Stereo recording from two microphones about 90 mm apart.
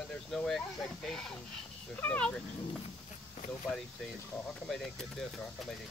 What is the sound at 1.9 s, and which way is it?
Speech, 15° left (ahead or behind).